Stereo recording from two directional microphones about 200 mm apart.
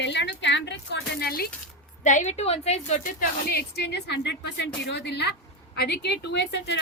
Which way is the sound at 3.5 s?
55° left (ahead or behind).